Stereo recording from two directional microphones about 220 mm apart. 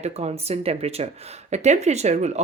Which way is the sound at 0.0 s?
30° right (ahead or behind).